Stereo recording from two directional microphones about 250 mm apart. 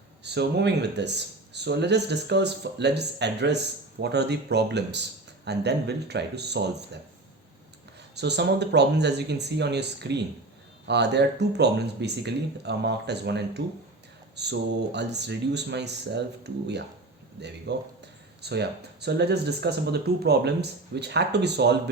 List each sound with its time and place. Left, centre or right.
0.2 s speech: right
8.1 s speech: right